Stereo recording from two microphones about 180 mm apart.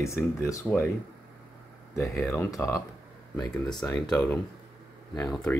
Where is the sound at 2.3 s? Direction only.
15° left (ahead or behind).